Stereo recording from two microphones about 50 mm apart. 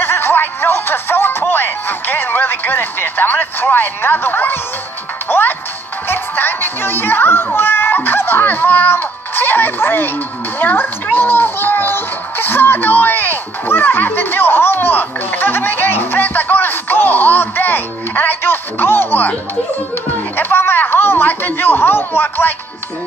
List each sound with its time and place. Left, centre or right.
0.0 s music: left
5.3 s a child's voice: left
20.3 s speech: left